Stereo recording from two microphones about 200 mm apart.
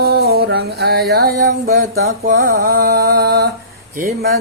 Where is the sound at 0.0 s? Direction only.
50° right (ahead or behind).